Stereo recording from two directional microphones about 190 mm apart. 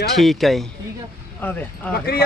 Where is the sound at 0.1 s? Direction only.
Centre (ahead or behind).